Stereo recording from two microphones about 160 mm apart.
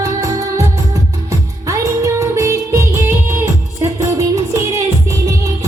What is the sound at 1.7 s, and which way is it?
Music, 20° right (ahead or behind).